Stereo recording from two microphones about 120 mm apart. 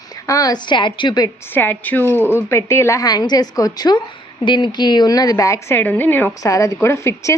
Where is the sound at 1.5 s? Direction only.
15° left (ahead or behind).